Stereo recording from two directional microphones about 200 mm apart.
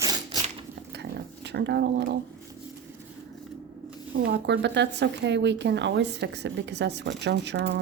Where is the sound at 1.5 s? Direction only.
55° right (ahead or behind).